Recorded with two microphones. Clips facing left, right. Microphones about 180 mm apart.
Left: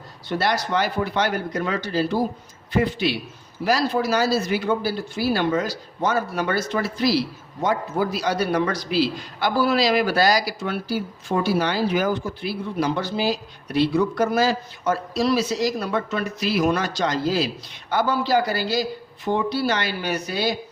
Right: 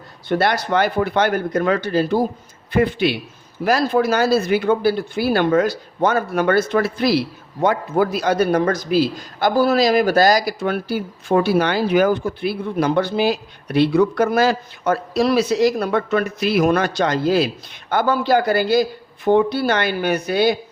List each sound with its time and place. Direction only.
0.3 s speech: 55° right (ahead or behind)